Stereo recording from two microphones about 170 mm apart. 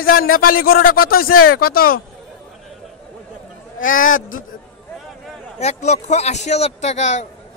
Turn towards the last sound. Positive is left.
turn(degrees=45)  # may be behind; listen again after turning